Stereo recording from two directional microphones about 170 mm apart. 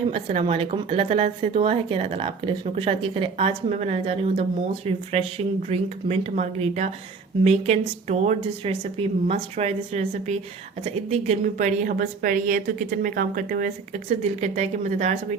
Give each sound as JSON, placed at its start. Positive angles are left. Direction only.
{"t": 0.1, "sound": "a woman's voice", "side_deg": -35}